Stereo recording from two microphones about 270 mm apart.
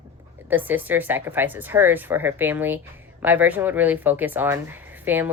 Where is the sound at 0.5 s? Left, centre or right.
Centre.